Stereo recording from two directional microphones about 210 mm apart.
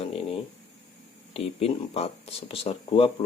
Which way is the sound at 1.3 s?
30° left (ahead or behind).